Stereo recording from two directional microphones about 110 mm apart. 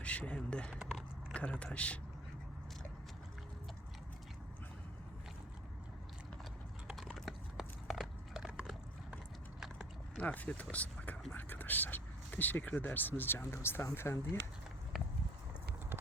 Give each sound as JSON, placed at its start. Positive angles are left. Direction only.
{"t": 0.0, "sound": "speech", "side_deg": 10}
{"t": 6.8, "sound": "horse", "side_deg": 0}
{"t": 10.2, "sound": "speech", "side_deg": 15}